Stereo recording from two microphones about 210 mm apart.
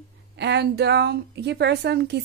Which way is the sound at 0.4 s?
55° right (ahead or behind).